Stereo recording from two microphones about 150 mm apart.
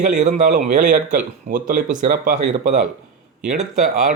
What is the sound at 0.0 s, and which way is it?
Speech, 55° right (ahead or behind).